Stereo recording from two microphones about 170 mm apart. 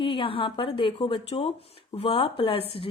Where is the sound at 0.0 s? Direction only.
30° left (ahead or behind).